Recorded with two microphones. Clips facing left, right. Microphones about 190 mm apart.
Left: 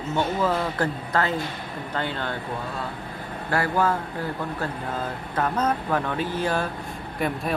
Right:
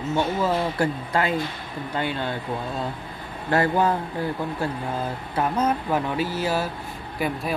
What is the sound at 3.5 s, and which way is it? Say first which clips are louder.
Speech: right 3 dB; 20° right (ahead or behind).